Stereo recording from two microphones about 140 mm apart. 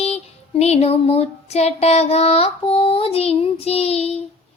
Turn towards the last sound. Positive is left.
turn(degrees=45)  # may be behind; listen again after turning